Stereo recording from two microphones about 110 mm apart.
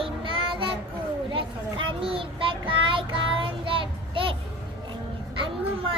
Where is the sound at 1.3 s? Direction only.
50° right (ahead or behind).